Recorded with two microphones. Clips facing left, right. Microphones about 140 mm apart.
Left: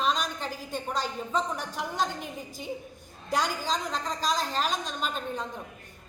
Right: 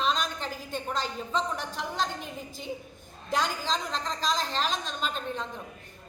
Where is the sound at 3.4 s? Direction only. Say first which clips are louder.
Even; 45° left (ahead or behind).